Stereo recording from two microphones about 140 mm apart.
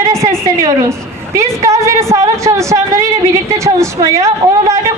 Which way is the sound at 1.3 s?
20° right (ahead or behind).